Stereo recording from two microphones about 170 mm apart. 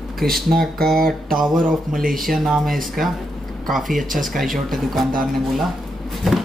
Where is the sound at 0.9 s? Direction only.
60° right (ahead or behind).